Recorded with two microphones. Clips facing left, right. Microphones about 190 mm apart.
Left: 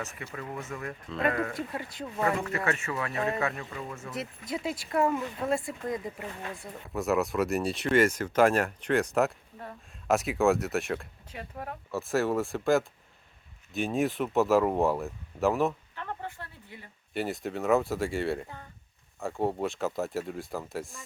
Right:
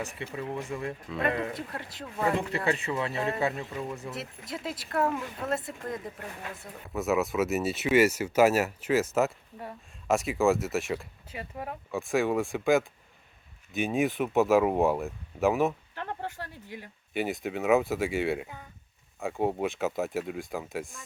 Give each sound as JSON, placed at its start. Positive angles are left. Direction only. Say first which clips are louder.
{"t": 0.2, "sound": "speech", "louder": "right 4 dB", "side_deg": -25}
{"t": 1.5, "sound": "speech", "louder": "left 3 dB", "side_deg": 0}
{"t": 2.6, "sound": "speech", "louder": "right 2 dB", "side_deg": -15}
{"t": 4.2, "sound": "speech", "louder": "left 3 dB", "side_deg": 0}
{"t": 16.2, "sound": "speech", "louder": "right 3 dB", "side_deg": -85}
{"t": 17.2, "sound": "speech", "louder": "right 1 dB", "side_deg": 0}